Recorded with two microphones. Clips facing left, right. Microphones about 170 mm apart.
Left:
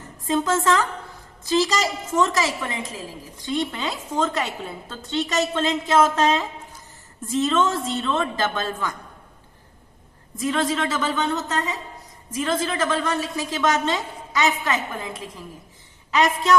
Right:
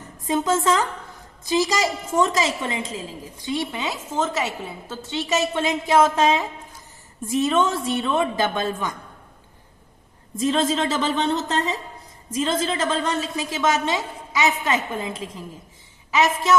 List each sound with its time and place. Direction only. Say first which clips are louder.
0.3 s a woman's voice: even; 20° right (ahead or behind)
2.3 s a woman's voice: right 1 dB; 25° right (ahead or behind)
3.5 s a woman's voice: left 1 dB; 10° right (ahead or behind)
10.3 s a woman's voice: right 2 dB; 25° right (ahead or behind)
13.7 s a woman's voice: even; 10° right (ahead or behind)
14.6 s a woman's voice: right 2 dB; 20° right (ahead or behind)
16.1 s a woman's voice: even; 5° right (ahead or behind)